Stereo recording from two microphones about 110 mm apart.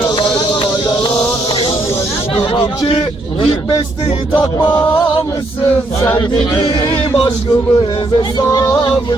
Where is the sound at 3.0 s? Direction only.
40° left (ahead or behind).